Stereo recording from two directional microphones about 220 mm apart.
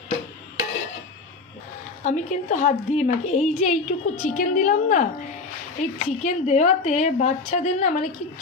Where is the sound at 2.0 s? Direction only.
35° left (ahead or behind).